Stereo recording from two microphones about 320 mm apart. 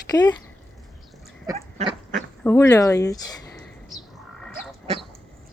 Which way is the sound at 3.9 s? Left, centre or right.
Centre.